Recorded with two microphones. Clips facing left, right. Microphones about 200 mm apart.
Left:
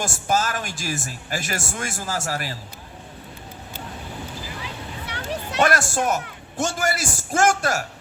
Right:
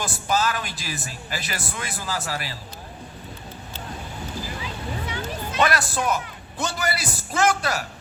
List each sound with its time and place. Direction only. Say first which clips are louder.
0.0 s speech: left 1 dB; 45° left (ahead or behind)
4.6 s a sound: right 3 dB; 70° left (ahead or behind)
5.6 s speech: left 3 dB; 45° left (ahead or behind)